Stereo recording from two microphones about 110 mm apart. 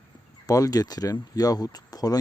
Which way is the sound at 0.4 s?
35° left (ahead or behind).